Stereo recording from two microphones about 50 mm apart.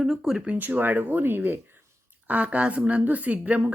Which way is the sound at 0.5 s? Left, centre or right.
Right.